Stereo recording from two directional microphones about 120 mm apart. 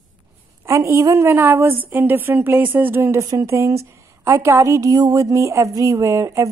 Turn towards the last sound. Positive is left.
turn(degrees=-25)  # may be behind; listen again after turning